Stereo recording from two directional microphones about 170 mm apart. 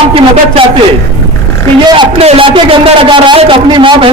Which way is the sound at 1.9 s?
35° right (ahead or behind).